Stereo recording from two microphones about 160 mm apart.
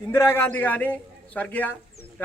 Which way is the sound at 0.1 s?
15° left (ahead or behind).